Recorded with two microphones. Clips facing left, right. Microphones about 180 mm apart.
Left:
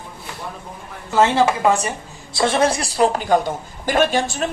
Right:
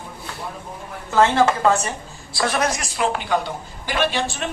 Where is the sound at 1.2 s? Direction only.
15° left (ahead or behind).